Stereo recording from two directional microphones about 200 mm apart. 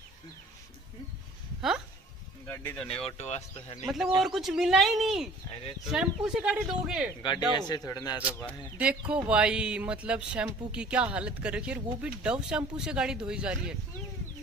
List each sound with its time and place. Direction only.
2.4 s speech: 10° left (ahead or behind)
3.1 s speech: 35° left (ahead or behind)
3.8 s speech: centre (ahead or behind)
7.5 s a man's voice: 20° left (ahead or behind)
9.1 s speech: 5° right (ahead or behind)